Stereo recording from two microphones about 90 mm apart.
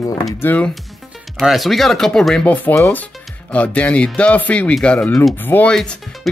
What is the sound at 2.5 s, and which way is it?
Speech, 20° left (ahead or behind).